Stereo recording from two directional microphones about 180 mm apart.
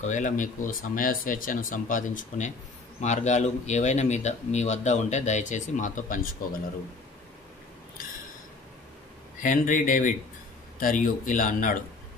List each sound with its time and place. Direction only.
0.0 s speech: 45° left (ahead or behind)
9.4 s speech: 45° left (ahead or behind)